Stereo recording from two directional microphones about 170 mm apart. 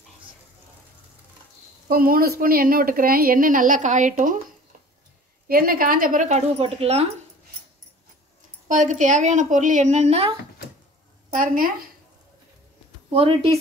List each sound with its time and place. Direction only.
1.9 s a woman's voice: 60° right (ahead or behind)
5.5 s a woman's voice: 60° right (ahead or behind); by 7.1 s 35° right (ahead or behind)
8.6 s a woman's voice: 45° right (ahead or behind)
11.3 s a woman's voice: 55° right (ahead or behind)
13.1 s speech: 35° right (ahead or behind)